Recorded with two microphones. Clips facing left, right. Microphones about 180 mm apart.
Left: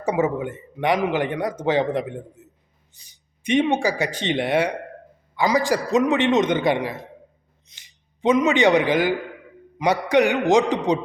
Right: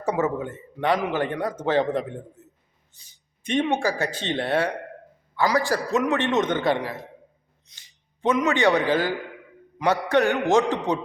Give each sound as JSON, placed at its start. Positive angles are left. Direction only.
{"t": 0.0, "sound": "a man's voice", "side_deg": 15}
{"t": 2.4, "sound": "a sound", "side_deg": 15}
{"t": 3.1, "sound": "a man's voice", "side_deg": 15}